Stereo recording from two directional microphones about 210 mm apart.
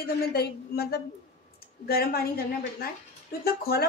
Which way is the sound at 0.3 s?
50° left (ahead or behind).